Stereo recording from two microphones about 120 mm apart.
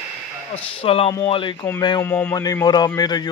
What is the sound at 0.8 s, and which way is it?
Speech, 55° left (ahead or behind).